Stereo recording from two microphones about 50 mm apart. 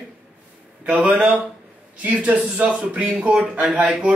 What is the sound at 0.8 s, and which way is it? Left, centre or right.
A man's voice, right.